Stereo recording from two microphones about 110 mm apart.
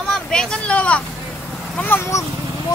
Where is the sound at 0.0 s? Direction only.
5° left (ahead or behind).